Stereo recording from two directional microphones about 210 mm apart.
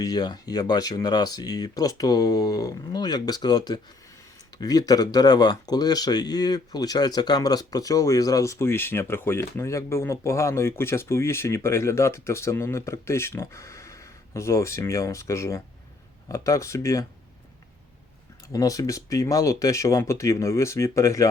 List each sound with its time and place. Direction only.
0.0 s speech: 20° left (ahead or behind)
18.5 s speech: 15° left (ahead or behind)